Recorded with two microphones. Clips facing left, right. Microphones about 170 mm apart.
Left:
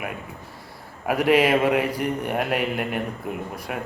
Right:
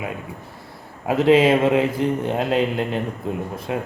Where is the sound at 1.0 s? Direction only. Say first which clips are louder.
Right 4 dB; 25° right (ahead or behind).